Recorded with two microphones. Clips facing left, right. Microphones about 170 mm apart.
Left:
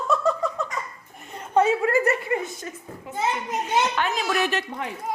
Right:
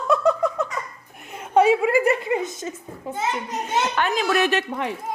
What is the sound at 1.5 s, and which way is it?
A woman's voice, 15° right (ahead or behind).